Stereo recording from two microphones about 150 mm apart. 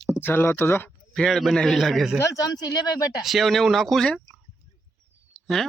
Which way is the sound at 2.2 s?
25° left (ahead or behind).